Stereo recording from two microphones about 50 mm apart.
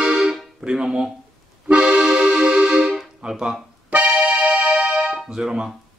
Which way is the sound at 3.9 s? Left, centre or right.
Right.